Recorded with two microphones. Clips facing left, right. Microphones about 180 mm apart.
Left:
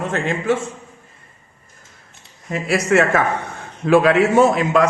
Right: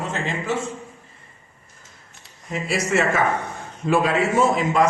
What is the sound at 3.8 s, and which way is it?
A man's voice, 75° left (ahead or behind).